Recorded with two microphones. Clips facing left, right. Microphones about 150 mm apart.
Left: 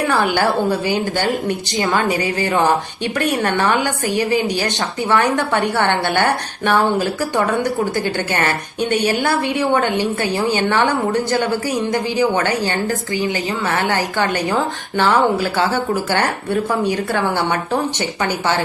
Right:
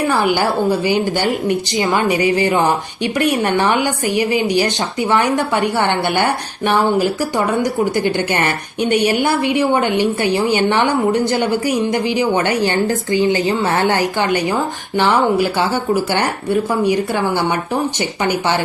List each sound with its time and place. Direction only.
0.3 s a woman's voice: centre (ahead or behind)
1.0 s a woman's voice: 15° right (ahead or behind)
7.6 s a woman's voice: 20° right (ahead or behind)
11.3 s a woman's voice: 20° right (ahead or behind)
18.2 s speech: 15° right (ahead or behind)